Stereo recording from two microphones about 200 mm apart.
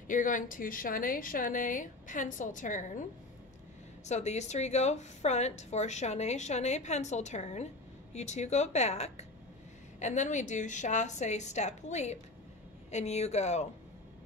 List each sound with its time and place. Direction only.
0.1 s a woman's voice: 40° left (ahead or behind)